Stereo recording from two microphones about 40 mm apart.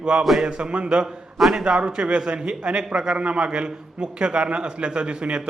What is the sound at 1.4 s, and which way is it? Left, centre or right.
Speech, centre.